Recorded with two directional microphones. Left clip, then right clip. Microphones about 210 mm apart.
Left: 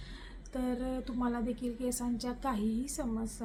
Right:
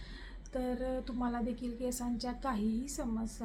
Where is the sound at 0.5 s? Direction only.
5° left (ahead or behind).